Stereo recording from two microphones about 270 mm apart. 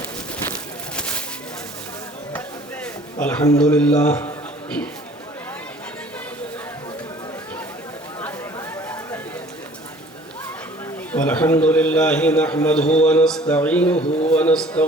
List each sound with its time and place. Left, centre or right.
0.9 s a sound: centre
2.8 s a man's voice: centre
8.2 s chatter: centre
11.1 s a man's voice: centre
13.9 s a man's voice: left
14.3 s a man's voice: centre